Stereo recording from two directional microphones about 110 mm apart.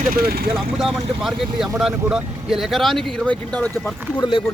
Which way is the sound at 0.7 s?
Centre (ahead or behind).